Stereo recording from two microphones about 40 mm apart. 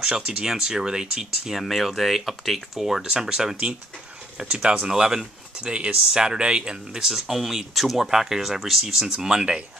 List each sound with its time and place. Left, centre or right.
0.0 s speech: centre
1.6 s speech: centre
4.4 s speech: right
4.8 s speech: centre
7.1 s speech: centre